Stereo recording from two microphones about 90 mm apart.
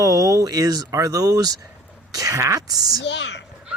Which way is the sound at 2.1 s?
40° right (ahead or behind).